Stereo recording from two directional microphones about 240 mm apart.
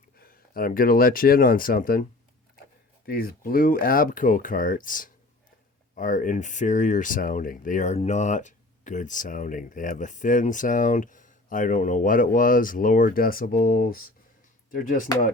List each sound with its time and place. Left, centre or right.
0.2 s speech: left
3.1 s speech: left